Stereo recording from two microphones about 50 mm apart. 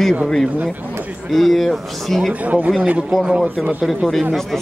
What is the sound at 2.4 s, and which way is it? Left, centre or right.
Speech, right.